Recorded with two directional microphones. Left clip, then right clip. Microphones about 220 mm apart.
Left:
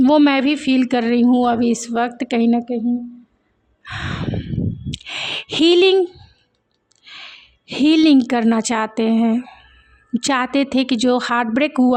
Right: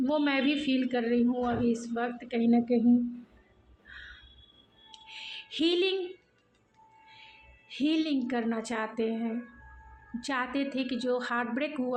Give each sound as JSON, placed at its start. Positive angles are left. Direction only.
{"t": 0.0, "sound": "a woman's voice", "side_deg": 45}
{"t": 3.8, "sound": "a woman's voice", "side_deg": 50}
{"t": 4.9, "sound": "a sound", "side_deg": 50}
{"t": 7.1, "sound": "a woman's voice", "side_deg": 50}